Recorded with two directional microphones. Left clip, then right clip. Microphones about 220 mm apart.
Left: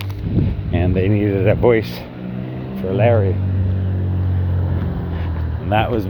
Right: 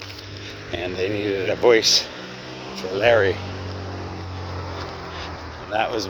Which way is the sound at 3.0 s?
20° right (ahead or behind).